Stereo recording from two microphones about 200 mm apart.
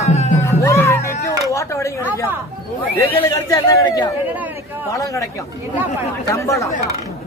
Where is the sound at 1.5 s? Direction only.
15° left (ahead or behind).